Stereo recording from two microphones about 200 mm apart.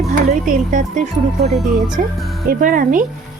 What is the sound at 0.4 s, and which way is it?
Speech, 40° right (ahead or behind).